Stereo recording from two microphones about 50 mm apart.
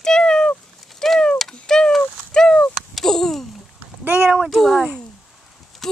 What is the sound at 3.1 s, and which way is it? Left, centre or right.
Speech, centre.